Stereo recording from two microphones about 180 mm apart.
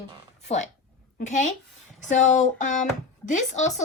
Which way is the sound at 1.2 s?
40° left (ahead or behind).